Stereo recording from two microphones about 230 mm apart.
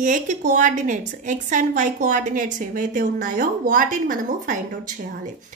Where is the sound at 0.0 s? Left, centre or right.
Right.